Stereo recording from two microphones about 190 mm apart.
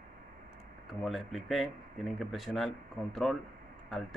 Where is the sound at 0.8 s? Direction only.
Centre (ahead or behind).